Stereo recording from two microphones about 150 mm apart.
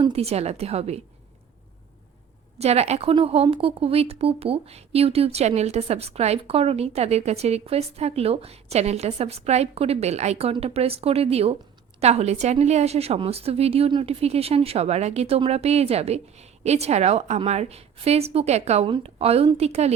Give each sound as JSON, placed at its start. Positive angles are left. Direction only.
{"t": 0.0, "sound": "a woman's voice", "side_deg": -45}
{"t": 2.6, "sound": "a woman's voice", "side_deg": -45}